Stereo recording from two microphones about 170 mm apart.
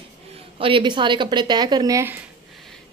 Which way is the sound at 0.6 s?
30° right (ahead or behind).